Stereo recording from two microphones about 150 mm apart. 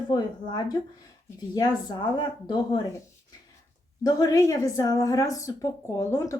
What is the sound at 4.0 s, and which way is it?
Speech, 25° left (ahead or behind).